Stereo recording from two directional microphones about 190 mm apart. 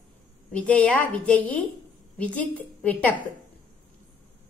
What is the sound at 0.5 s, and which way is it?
A woman's voice, 5° left (ahead or behind).